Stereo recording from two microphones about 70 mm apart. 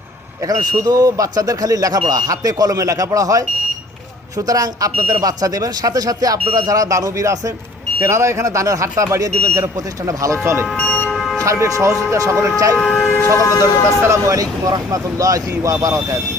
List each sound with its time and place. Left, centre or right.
0.4 s speech: right
10.8 s vehicle: left
11.1 s a sound: centre
11.4 s speech: right
12.7 s speech: centre
13.0 s speech: left
13.4 s speech: left
14.0 s speech: right